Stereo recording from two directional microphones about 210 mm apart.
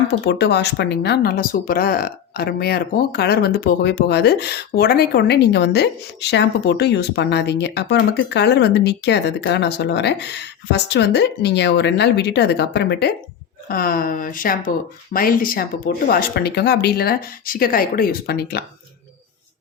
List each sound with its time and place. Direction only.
0.3 s speech: 55° left (ahead or behind)